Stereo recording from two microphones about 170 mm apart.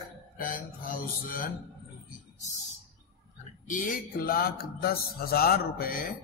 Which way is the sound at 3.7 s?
50° left (ahead or behind).